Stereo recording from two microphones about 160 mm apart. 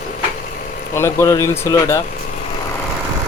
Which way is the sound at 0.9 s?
15° left (ahead or behind).